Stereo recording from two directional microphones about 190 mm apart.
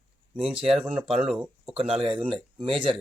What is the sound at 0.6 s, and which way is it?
Speech, 5° right (ahead or behind).